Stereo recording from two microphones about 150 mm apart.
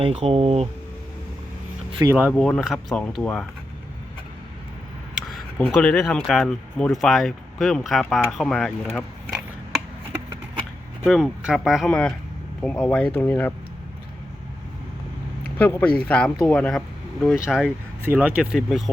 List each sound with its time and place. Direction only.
0.0 s speech: 45° right (ahead or behind)
2.0 s speech: 20° right (ahead or behind)
2.3 s speech: centre (ahead or behind)
5.5 s speech: 5° left (ahead or behind)
11.0 s speech: centre (ahead or behind)
15.5 s speech: 10° left (ahead or behind); by 18.8 s 5° right (ahead or behind)